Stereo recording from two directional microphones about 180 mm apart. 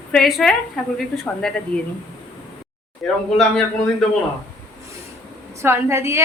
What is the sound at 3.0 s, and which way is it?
A woman's voice, 5° left (ahead or behind).